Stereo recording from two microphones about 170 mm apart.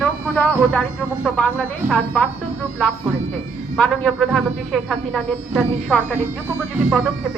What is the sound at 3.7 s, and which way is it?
Speech, 5° left (ahead or behind).